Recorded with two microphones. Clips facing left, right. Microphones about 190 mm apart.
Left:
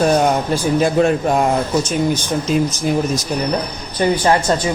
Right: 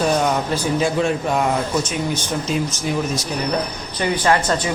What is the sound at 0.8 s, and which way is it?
Speech, 45° left (ahead or behind).